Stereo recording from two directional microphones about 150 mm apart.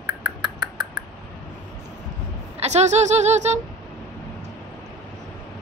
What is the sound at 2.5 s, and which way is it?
Speech, 50° right (ahead or behind).